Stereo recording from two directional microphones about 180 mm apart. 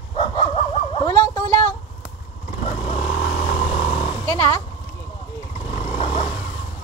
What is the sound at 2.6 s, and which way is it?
Vehicle, 35° left (ahead or behind).